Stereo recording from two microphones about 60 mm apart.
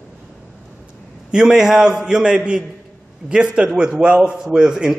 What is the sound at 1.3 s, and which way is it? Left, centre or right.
A man's voice, centre.